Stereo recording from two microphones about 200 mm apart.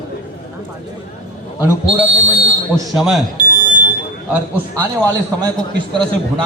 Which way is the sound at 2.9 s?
Centre (ahead or behind).